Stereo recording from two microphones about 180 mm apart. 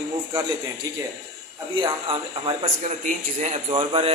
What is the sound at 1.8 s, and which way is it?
Speech, 30° right (ahead or behind).